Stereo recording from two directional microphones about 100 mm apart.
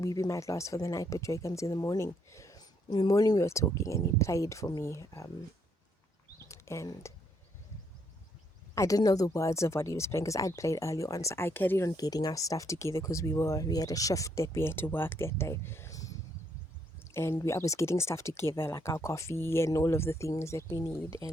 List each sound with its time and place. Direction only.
0.0 s speech: 35° left (ahead or behind)
6.5 s a sound: 30° left (ahead or behind)
7.1 s speech: 30° left (ahead or behind)
8.7 s speech: 30° left (ahead or behind)
11.9 s speech: 40° left (ahead or behind)
17.4 s speech: 30° left (ahead or behind)